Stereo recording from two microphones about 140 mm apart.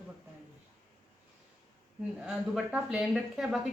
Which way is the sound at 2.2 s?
5° right (ahead or behind).